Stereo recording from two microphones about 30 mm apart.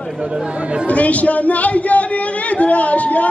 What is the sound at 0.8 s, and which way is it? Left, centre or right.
Speech, left.